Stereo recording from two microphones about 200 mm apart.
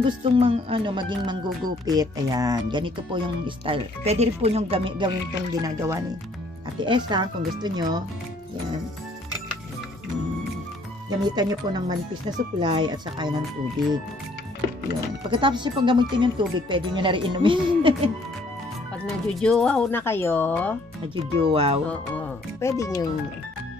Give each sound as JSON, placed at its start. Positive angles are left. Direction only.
{"t": 0.0, "sound": "speech", "side_deg": -25}
{"t": 11.1, "sound": "speech", "side_deg": -20}
{"t": 15.2, "sound": "speech", "side_deg": -25}
{"t": 19.4, "sound": "speech", "side_deg": 5}
{"t": 21.1, "sound": "speech", "side_deg": -25}
{"t": 22.1, "sound": "speech", "side_deg": 15}